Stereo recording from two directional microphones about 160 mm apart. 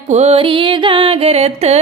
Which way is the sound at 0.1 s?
40° right (ahead or behind).